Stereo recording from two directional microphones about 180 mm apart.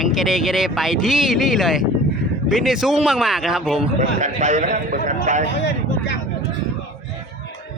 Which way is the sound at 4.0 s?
45° right (ahead or behind).